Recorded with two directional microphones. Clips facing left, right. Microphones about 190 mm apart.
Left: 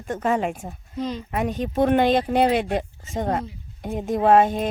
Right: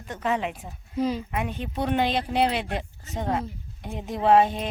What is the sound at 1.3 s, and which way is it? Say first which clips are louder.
Speech: left 5 dB; 40° left (ahead or behind).